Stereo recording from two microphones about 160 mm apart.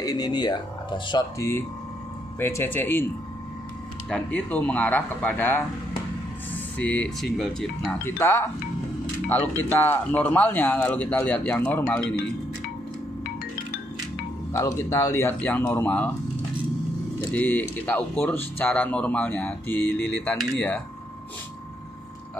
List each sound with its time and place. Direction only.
0.0 s speech: 25° left (ahead or behind)
2.3 s speech: 15° left (ahead or behind)
4.1 s speech: 10° left (ahead or behind)
8.0 s speech: 15° left (ahead or behind)
9.6 s speech: 15° left (ahead or behind)
14.5 s speech: 20° left (ahead or behind)
17.3 s speech: 10° left (ahead or behind)